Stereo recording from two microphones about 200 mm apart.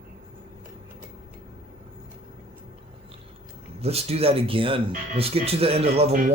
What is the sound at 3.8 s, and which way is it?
Speech, 30° right (ahead or behind).